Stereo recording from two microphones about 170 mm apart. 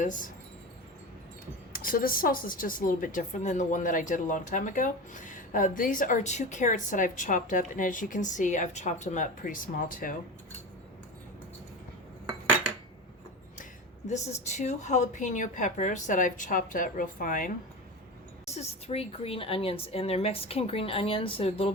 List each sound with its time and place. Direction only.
0.0 s speech: 50° left (ahead or behind)
1.7 s speech: 55° left (ahead or behind)
14.1 s speech: 40° left (ahead or behind)
18.4 s a woman's voice: 40° left (ahead or behind)